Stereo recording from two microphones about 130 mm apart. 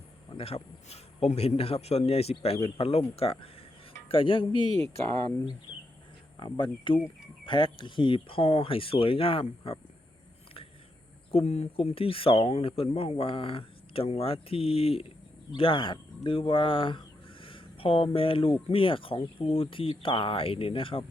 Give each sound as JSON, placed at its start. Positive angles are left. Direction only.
{"t": 0.3, "sound": "speech", "side_deg": 50}
{"t": 6.4, "sound": "speech", "side_deg": 40}
{"t": 11.3, "sound": "speech", "side_deg": 50}